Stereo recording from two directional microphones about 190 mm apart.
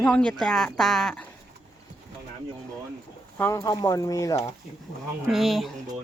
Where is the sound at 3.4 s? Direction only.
20° left (ahead or behind).